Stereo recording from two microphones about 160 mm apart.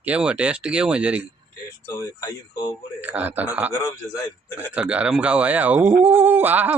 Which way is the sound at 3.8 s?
20° left (ahead or behind).